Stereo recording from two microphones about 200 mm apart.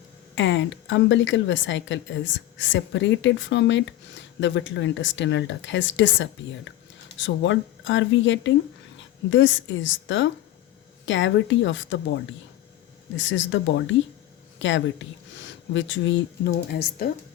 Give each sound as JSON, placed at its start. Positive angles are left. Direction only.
{"t": 0.3, "sound": "a woman's voice", "side_deg": 65}
{"t": 16.6, "sound": "speech", "side_deg": 50}